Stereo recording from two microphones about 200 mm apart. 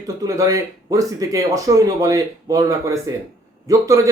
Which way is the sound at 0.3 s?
15° right (ahead or behind).